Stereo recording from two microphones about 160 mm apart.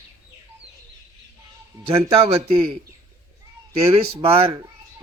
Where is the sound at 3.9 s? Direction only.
35° right (ahead or behind).